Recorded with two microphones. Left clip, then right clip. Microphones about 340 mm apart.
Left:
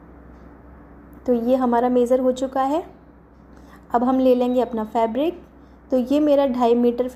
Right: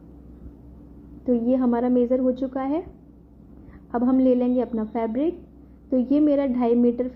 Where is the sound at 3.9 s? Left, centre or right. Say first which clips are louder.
Left 3 dB; left.